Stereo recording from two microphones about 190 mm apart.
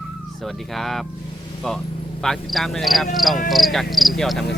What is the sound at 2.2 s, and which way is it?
Speech, centre (ahead or behind).